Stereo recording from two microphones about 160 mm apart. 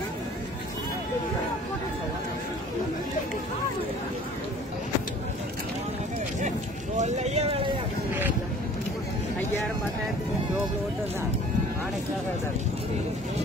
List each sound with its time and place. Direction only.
7.0 s vehicle: 45° right (ahead or behind)